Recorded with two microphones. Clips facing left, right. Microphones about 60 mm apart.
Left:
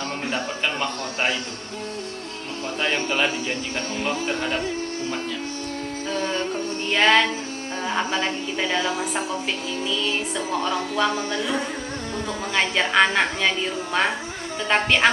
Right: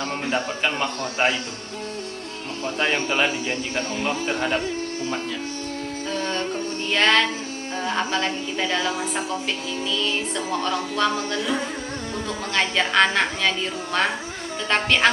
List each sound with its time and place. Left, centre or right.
0.3 s a man's voice: centre
2.8 s a man's voice: centre
3.8 s music: centre
6.1 s music: centre
12.5 s a woman's voice: centre